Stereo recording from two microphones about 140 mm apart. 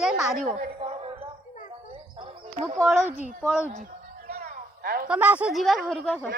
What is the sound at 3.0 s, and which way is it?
Speech, 55° left (ahead or behind).